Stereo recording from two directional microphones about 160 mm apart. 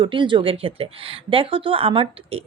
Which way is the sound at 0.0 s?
30° right (ahead or behind).